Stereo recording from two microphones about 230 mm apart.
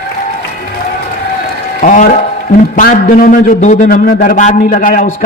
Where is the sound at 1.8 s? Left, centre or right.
Left.